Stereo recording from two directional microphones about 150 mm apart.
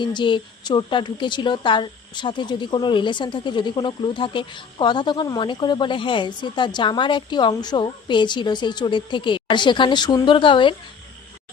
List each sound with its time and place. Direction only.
0.0 s a woman's voice: 30° left (ahead or behind)